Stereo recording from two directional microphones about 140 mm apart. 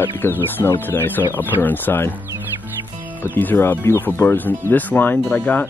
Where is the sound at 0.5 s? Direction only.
15° left (ahead or behind).